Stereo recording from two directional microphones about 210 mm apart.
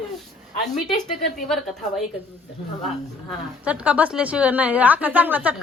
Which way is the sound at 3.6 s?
5° right (ahead or behind).